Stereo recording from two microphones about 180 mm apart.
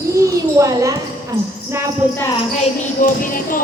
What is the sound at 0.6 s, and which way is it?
Speech, 20° right (ahead or behind).